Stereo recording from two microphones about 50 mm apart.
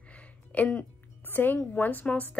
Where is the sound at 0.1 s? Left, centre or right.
Left.